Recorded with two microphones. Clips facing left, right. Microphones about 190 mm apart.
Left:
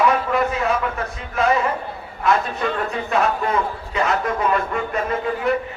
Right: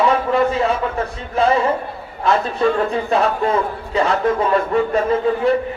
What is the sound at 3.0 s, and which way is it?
A man's voice, 30° right (ahead or behind).